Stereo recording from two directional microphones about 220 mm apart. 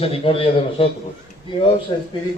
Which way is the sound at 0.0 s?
25° left (ahead or behind).